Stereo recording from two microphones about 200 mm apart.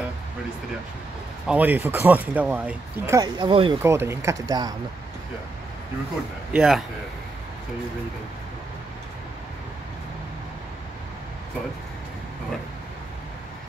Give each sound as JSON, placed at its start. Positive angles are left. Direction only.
{"t": 1.5, "sound": "speech", "side_deg": -10}
{"t": 3.2, "sound": "speech", "side_deg": -20}
{"t": 3.8, "sound": "speech", "side_deg": -15}
{"t": 6.5, "sound": "a man's voice", "side_deg": -5}